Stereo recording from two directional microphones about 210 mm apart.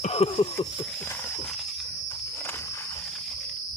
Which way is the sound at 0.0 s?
30° left (ahead or behind).